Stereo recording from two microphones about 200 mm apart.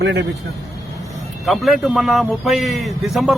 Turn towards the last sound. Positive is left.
turn(degrees=0)  # may be behind; listen again after turning